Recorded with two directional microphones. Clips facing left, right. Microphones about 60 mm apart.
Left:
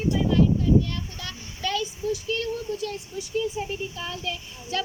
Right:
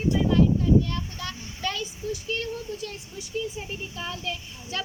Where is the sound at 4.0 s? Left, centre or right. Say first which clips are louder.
Left 1 dB; centre.